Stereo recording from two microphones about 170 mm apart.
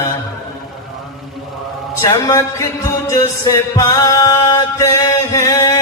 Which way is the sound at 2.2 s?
20° left (ahead or behind).